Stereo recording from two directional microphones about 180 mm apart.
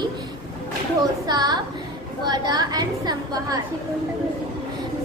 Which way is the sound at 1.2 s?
20° right (ahead or behind).